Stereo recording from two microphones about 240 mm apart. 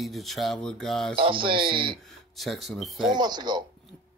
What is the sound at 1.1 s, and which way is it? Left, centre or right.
Speech, right.